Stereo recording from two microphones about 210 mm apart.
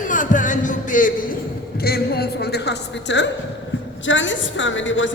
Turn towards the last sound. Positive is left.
turn(degrees=65)  # may be behind; listen again after turning